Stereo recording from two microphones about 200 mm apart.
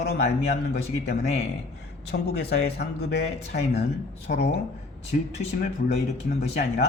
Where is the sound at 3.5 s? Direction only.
55° left (ahead or behind).